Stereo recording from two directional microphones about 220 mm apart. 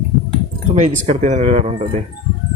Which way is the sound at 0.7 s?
35° right (ahead or behind).